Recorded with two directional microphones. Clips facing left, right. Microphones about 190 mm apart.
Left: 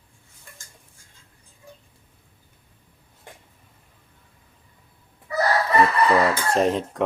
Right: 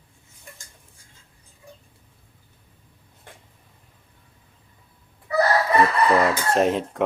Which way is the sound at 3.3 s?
15° left (ahead or behind).